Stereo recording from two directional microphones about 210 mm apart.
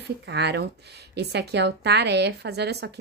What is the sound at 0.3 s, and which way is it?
A woman's voice, 50° right (ahead or behind).